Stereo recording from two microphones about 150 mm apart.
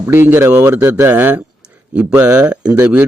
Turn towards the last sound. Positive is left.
turn(degrees=-10)  # may be behind; listen again after turning